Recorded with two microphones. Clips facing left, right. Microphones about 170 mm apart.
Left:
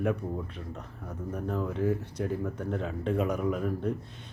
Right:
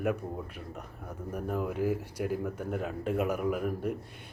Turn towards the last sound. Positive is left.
turn(degrees=-10)  # may be behind; listen again after turning